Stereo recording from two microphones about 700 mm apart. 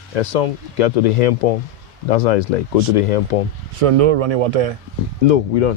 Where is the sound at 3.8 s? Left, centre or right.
Right.